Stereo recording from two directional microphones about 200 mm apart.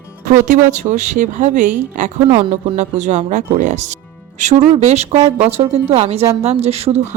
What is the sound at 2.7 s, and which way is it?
Speech, 35° right (ahead or behind).